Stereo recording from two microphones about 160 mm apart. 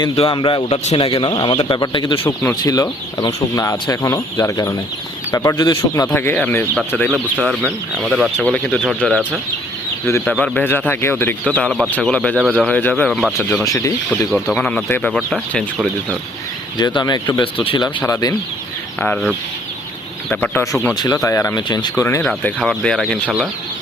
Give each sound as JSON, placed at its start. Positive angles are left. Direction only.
{"t": 0.2, "sound": "speech", "side_deg": 30}
{"t": 2.2, "sound": "speech", "side_deg": 15}
{"t": 6.1, "sound": "speech", "side_deg": 10}
{"t": 10.1, "sound": "speech", "side_deg": 15}
{"t": 10.3, "sound": "speech", "side_deg": 5}
{"t": 12.4, "sound": "speech", "side_deg": -5}
{"t": 12.6, "sound": "speech", "side_deg": 5}
{"t": 13.7, "sound": "speech", "side_deg": 20}
{"t": 14.1, "sound": "speech", "side_deg": 0}
{"t": 16.7, "sound": "speech", "side_deg": 25}
{"t": 18.9, "sound": "speech", "side_deg": 10}
{"t": 20.3, "sound": "speech", "side_deg": 10}
{"t": 22.2, "sound": "speech", "side_deg": 5}